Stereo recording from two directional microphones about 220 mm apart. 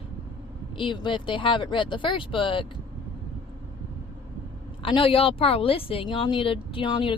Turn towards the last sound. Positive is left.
turn(degrees=20)  # may be behind; listen again after turning